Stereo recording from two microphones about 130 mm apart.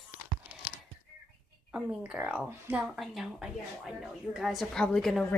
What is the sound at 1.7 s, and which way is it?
Speech, 10° right (ahead or behind).